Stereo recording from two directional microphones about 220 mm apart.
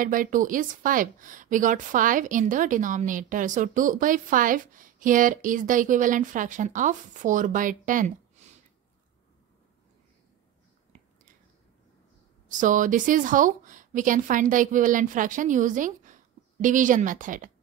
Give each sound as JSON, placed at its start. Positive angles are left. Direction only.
{"t": 0.0, "sound": "a woman's voice", "side_deg": -40}
{"t": 8.4, "sound": "a sound", "side_deg": -30}
{"t": 12.4, "sound": "a woman's voice", "side_deg": -35}